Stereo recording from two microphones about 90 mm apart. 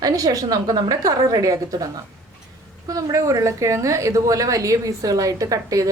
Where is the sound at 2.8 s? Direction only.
40° right (ahead or behind).